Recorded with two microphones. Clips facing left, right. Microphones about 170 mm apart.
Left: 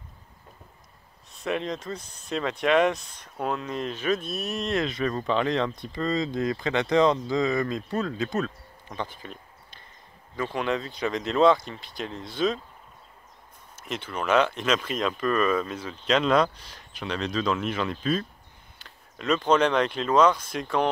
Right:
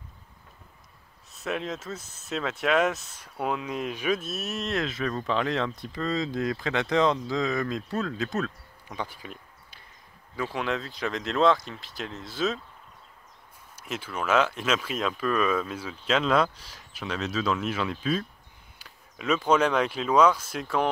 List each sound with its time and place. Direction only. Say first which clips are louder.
1.3 s speech: left 2 dB; 5° right (ahead or behind)
13.8 s speech: left 1 dB; 5° right (ahead or behind)